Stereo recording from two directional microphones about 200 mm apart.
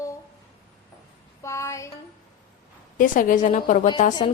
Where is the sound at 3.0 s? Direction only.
40° left (ahead or behind).